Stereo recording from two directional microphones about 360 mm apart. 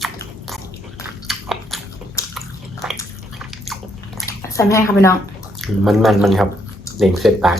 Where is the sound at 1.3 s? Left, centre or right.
Centre.